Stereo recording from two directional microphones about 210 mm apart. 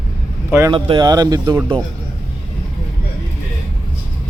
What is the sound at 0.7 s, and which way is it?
Speech, 25° right (ahead or behind).